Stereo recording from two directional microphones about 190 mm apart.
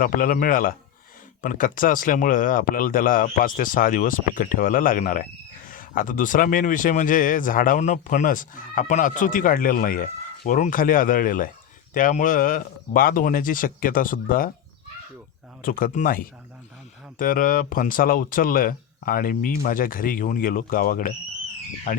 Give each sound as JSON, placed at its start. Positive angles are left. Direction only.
{"t": 0.0, "sound": "speech", "side_deg": 45}
{"t": 15.6, "sound": "speech", "side_deg": 50}